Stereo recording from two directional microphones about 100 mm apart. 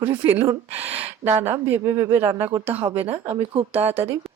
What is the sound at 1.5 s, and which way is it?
Speech, 20° right (ahead or behind).